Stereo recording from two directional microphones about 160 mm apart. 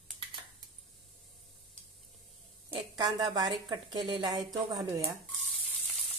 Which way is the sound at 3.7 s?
25° right (ahead or behind).